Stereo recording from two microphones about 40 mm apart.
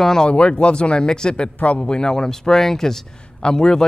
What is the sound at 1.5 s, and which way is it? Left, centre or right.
Speech, left.